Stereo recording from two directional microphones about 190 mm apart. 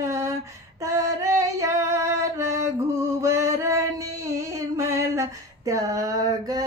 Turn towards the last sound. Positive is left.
turn(degrees=-20)  # may be behind; listen again after turning